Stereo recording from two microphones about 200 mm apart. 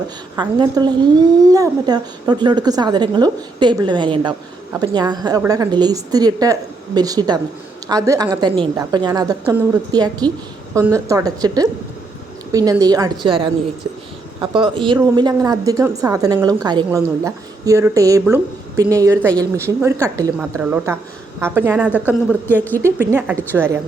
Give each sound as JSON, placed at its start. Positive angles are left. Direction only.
{"t": 0.3, "sound": "a woman's voice", "side_deg": -20}
{"t": 22.4, "sound": "speech", "side_deg": 10}
{"t": 22.8, "sound": "a woman's voice", "side_deg": -10}